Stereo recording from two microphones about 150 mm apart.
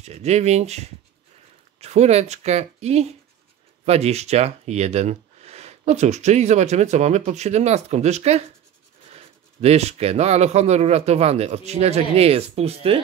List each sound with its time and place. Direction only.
0.0 s speech: 45° right (ahead or behind)